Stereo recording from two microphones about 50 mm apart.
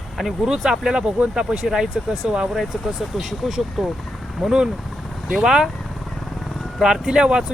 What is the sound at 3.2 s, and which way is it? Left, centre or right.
Speech, centre.